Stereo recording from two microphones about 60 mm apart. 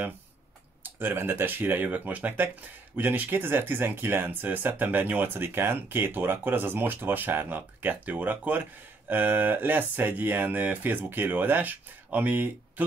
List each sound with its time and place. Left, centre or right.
0.8 s speech: right